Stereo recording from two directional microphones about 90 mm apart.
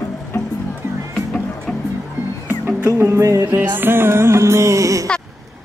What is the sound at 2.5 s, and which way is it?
Music, 25° right (ahead or behind).